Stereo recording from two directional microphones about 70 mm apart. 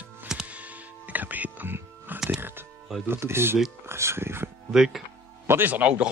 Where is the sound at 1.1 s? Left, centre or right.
Right.